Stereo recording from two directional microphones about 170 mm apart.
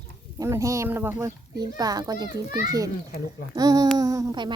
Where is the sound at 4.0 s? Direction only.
20° right (ahead or behind).